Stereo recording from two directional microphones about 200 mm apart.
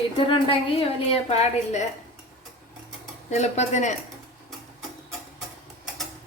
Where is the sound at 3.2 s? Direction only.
35° left (ahead or behind).